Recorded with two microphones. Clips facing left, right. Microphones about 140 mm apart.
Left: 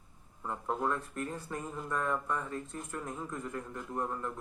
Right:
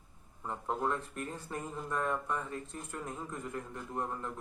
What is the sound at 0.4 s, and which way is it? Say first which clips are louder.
A man's voice: left 1 dB; 20° right (ahead or behind).